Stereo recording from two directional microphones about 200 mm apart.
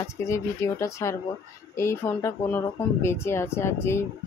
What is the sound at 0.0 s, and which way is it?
Speech, 15° left (ahead or behind).